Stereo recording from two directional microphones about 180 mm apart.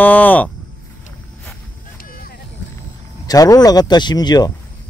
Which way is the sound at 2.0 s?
55° left (ahead or behind).